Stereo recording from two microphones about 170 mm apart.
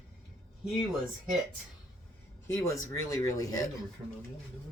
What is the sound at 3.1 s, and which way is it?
Speech, 20° left (ahead or behind).